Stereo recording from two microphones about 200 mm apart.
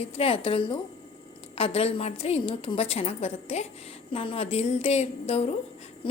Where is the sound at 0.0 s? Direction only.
30° left (ahead or behind).